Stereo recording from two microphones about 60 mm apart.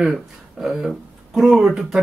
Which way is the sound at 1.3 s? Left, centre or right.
Centre.